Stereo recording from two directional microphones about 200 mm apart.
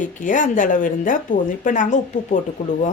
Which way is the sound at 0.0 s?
40° left (ahead or behind).